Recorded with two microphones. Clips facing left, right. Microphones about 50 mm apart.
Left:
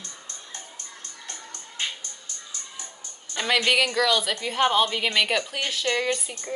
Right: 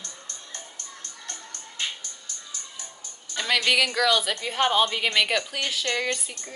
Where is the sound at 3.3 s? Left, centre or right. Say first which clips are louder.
Left 1 dB; centre.